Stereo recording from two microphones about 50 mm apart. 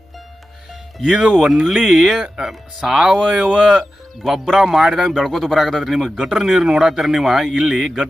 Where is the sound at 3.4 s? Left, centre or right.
Centre.